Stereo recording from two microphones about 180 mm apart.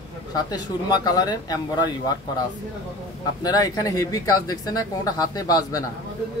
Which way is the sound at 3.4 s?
20° left (ahead or behind).